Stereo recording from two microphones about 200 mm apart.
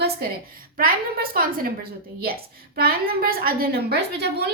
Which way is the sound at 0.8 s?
45° right (ahead or behind).